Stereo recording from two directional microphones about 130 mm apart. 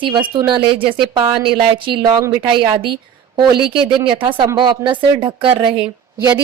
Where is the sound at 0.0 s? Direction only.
40° right (ahead or behind).